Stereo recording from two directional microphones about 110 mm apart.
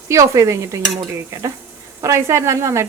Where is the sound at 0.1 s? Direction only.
30° right (ahead or behind).